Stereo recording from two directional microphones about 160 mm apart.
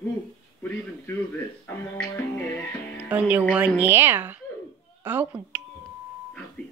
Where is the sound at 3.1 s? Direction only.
10° right (ahead or behind).